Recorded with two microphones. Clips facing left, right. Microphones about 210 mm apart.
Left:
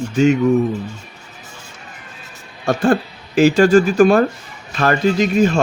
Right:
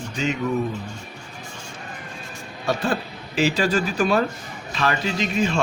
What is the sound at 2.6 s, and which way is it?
Speech, 50° left (ahead or behind).